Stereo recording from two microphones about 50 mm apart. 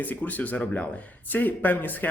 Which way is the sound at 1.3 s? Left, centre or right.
Left.